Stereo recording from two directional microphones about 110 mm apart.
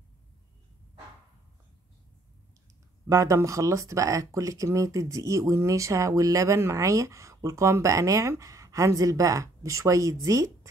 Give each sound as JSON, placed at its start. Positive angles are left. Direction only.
{"t": 3.1, "sound": "a woman's voice", "side_deg": -30}